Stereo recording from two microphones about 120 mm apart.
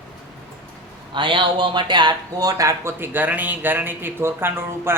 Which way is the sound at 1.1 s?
45° right (ahead or behind).